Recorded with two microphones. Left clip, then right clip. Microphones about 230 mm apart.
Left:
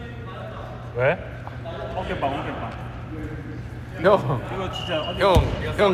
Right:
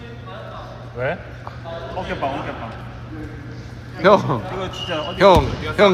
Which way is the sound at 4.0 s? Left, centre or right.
Right.